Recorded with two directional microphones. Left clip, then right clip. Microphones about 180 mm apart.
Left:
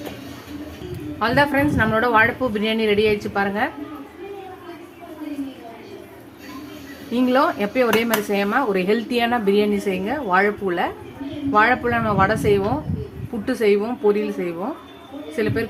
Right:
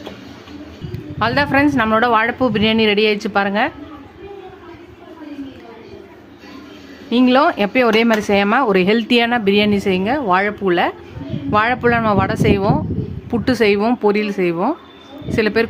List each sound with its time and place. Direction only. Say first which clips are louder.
1.2 s speech: right 3 dB; 40° right (ahead or behind)
7.1 s a man's voice: right 5 dB; 45° right (ahead or behind)